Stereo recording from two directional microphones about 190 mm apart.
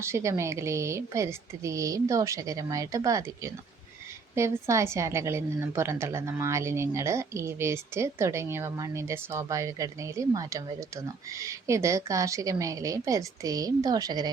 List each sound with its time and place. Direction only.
0.0 s a woman's voice: 15° right (ahead or behind)